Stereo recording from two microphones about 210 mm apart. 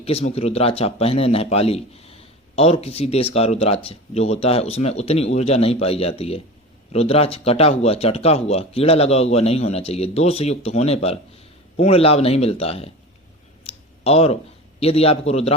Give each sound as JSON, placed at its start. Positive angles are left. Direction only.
{"t": 0.0, "sound": "a man's voice", "side_deg": 30}
{"t": 13.7, "sound": "a sound", "side_deg": 30}
{"t": 14.8, "sound": "a man's voice", "side_deg": 30}